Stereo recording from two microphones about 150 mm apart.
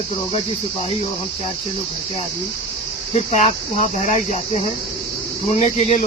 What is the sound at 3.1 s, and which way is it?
Cricket, 45° left (ahead or behind).